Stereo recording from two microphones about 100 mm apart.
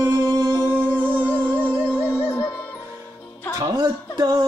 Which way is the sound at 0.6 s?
20° right (ahead or behind).